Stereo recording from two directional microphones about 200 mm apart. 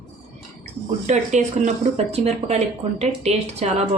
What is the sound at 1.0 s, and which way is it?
Speech, 35° right (ahead or behind).